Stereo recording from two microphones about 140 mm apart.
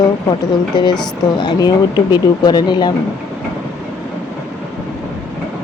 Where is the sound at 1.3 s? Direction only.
30° left (ahead or behind).